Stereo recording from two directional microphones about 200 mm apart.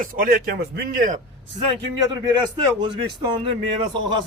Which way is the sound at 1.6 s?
20° right (ahead or behind).